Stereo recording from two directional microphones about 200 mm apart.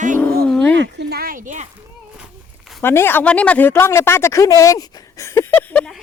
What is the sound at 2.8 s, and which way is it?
Speech, 10° left (ahead or behind).